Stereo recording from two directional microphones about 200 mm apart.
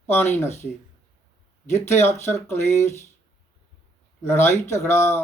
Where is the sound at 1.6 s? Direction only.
15° left (ahead or behind).